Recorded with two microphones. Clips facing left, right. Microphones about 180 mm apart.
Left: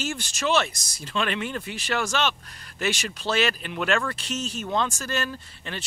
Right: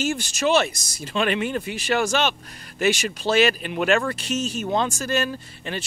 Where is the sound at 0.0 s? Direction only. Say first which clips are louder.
Right 5 dB; 15° right (ahead or behind).